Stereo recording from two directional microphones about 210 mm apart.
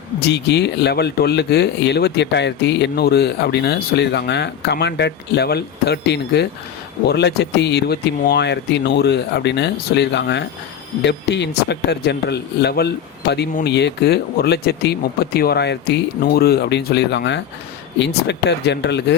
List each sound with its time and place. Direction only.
0.2 s speech: 55° left (ahead or behind)